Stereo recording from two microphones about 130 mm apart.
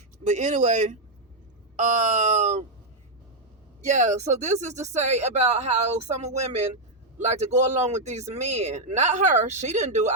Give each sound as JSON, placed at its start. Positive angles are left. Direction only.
{"t": 0.3, "sound": "speech", "side_deg": -70}
{"t": 3.8, "sound": "speech", "side_deg": -65}